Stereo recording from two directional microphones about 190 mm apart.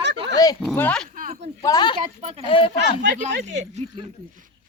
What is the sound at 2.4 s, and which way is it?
Speech, 30° left (ahead or behind).